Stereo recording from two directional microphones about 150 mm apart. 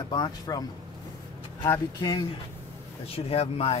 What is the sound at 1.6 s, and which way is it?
Speech, 20° left (ahead or behind).